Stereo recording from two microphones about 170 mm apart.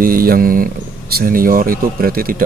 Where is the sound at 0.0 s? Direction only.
60° right (ahead or behind).